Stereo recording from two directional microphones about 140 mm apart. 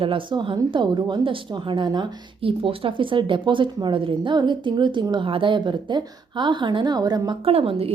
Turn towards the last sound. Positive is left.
turn(degrees=-40)  # may be behind; listen again after turning